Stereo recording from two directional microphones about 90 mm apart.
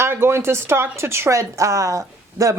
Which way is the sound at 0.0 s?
30° right (ahead or behind).